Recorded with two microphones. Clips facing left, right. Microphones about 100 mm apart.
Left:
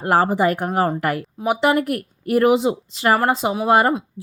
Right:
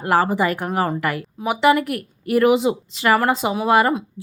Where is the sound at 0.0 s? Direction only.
45° left (ahead or behind).